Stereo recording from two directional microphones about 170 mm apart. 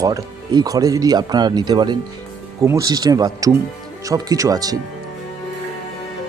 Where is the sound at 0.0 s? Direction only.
20° right (ahead or behind).